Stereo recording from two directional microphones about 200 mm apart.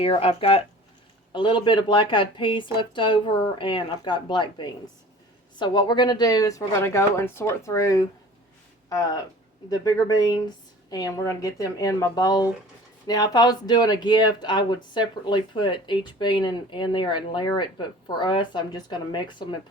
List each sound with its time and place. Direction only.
0.0 s a woman's voice: 30° left (ahead or behind)